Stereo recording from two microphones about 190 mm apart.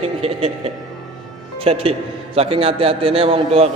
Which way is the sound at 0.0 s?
30° right (ahead or behind).